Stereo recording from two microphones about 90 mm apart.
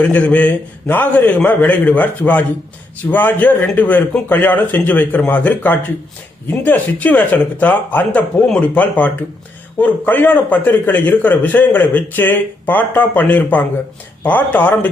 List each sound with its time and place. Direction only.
0.0 s a man's voice: 15° left (ahead or behind)